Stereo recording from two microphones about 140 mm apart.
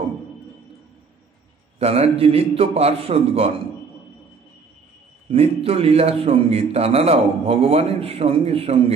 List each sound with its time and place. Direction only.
1.8 s a man's voice: 45° right (ahead or behind)
5.3 s a man's voice: 45° right (ahead or behind)